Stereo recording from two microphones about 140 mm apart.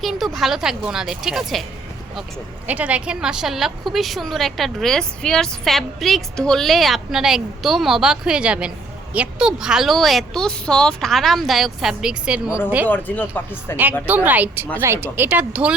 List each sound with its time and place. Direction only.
0.0 s a woman's voice: centre (ahead or behind)
2.6 s a woman's voice: 10° right (ahead or behind)
12.9 s speech: 15° left (ahead or behind)
14.1 s speech: 10° right (ahead or behind)